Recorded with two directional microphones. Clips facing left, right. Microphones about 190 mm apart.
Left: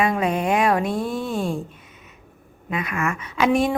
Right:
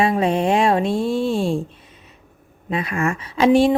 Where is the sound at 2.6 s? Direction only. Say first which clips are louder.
Right 3 dB; 30° right (ahead or behind).